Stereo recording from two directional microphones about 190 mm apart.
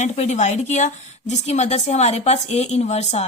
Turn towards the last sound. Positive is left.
turn(degrees=35)  # may be behind; listen again after turning